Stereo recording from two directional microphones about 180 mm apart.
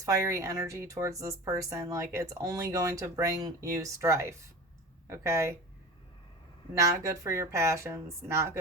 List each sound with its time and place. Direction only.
0.0 s speech: 15° right (ahead or behind)
6.7 s speech: 20° right (ahead or behind)